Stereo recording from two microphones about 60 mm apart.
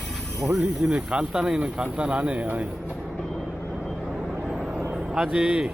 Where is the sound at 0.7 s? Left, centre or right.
Centre.